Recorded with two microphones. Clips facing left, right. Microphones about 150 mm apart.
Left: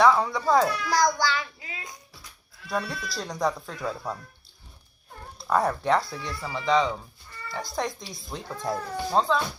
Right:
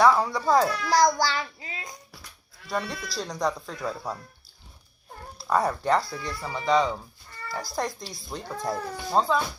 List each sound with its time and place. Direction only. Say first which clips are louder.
0.0 s speech: even; centre (ahead or behind)
0.9 s child singing: right 2 dB; 35° right (ahead or behind)
2.6 s speech: even; 5° left (ahead or behind)
5.4 s speech: even; centre (ahead or behind)